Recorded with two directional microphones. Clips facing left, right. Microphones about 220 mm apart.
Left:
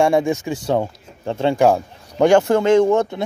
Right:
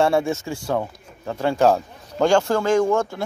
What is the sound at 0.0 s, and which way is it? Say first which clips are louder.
Speech: left 3 dB; 15° left (ahead or behind).